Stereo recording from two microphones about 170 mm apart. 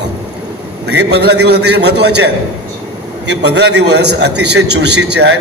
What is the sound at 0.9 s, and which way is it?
A man's voice, 80° right.